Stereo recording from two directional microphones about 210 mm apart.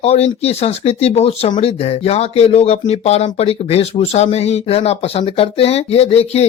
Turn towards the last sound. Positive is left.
turn(degrees=30)  # may be behind; listen again after turning